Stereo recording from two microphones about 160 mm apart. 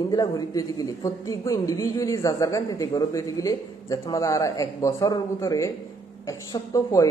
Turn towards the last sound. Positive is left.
turn(degrees=20)  # may be behind; listen again after turning